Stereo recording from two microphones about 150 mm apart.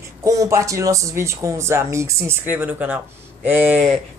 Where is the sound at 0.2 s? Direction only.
20° right (ahead or behind).